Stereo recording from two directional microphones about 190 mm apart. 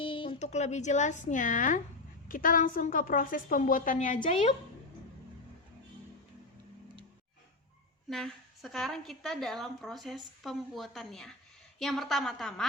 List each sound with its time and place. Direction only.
0.0 s a woman's voice: 25° left (ahead or behind); by 4.3 s 45° left (ahead or behind)
4.3 s a woman's voice: 30° left (ahead or behind)
8.1 s a woman's voice: centre (ahead or behind)